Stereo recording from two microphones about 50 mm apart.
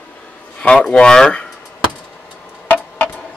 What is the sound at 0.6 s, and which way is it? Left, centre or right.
Speech, centre.